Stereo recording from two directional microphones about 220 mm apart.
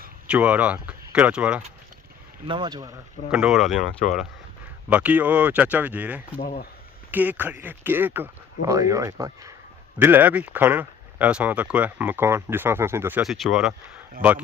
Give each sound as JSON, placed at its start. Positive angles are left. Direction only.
{"t": 0.3, "sound": "speech", "side_deg": -5}
{"t": 2.5, "sound": "speech", "side_deg": -20}
{"t": 3.2, "sound": "speech", "side_deg": -5}
{"t": 4.9, "sound": "speech", "side_deg": -5}